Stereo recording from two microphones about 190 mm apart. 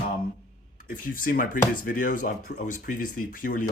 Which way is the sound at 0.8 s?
50° left (ahead or behind).